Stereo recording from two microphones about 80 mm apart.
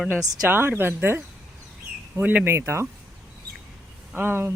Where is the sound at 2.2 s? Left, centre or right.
Centre.